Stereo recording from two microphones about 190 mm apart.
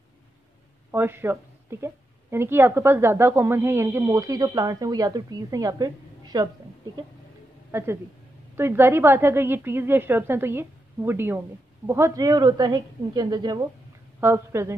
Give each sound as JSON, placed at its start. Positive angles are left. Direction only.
{"t": 0.9, "sound": "a woman's voice", "side_deg": -10}
{"t": 7.7, "sound": "a woman's voice", "side_deg": -15}